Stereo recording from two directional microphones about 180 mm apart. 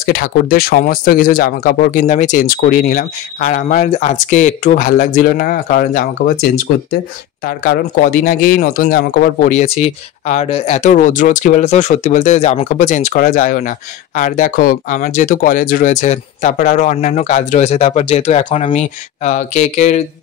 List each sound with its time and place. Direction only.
0.0 s speech: 55° left (ahead or behind)
7.4 s speech: 55° left (ahead or behind); by 20.0 s 40° left (ahead or behind)